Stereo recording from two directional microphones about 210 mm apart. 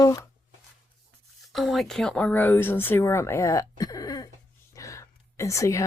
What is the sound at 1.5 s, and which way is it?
A woman's voice, centre (ahead or behind).